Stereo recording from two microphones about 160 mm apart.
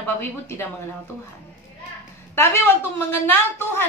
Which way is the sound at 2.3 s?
15° left (ahead or behind).